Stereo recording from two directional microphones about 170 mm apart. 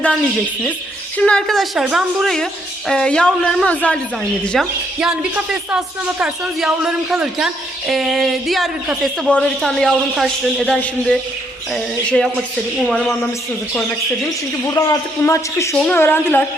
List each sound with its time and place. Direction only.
1.2 s speech: 5° left (ahead or behind)
4.6 s speech: 5° right (ahead or behind)
14.7 s a man's voice: 20° left (ahead or behind)